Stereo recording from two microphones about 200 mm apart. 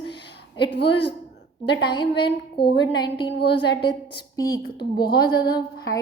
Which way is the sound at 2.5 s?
55° left (ahead or behind).